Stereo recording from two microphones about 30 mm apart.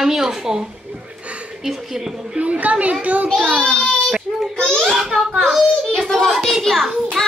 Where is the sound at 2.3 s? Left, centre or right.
Right.